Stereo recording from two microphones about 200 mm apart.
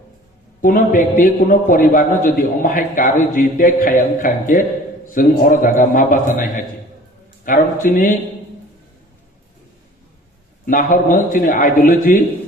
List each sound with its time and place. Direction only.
0.6 s a man's voice: 40° left (ahead or behind)
7.4 s a man's voice: 40° left (ahead or behind)
10.7 s a man's voice: 45° left (ahead or behind)